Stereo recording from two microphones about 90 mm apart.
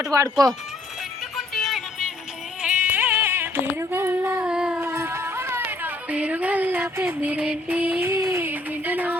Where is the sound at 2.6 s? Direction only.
20° right (ahead or behind).